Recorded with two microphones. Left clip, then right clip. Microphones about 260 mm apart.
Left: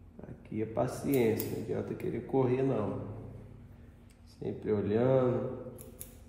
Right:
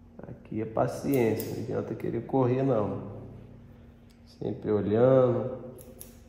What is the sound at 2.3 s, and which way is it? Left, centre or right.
Speech, right.